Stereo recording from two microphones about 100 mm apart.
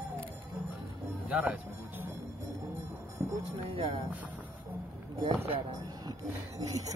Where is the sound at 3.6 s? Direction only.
65° right (ahead or behind).